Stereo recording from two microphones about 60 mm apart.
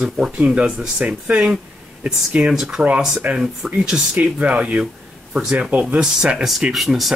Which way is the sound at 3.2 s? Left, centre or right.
Right.